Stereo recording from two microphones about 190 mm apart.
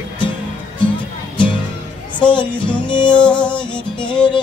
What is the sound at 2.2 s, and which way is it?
Music, 25° left (ahead or behind).